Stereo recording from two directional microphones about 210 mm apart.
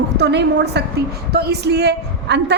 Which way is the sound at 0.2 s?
55° right (ahead or behind).